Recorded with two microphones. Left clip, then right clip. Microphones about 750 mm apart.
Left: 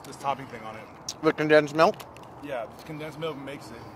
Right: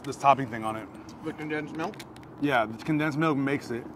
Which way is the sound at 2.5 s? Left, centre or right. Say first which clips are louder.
Right 9 dB; right.